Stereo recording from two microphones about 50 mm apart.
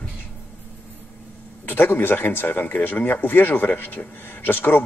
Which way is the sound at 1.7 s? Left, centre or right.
Left.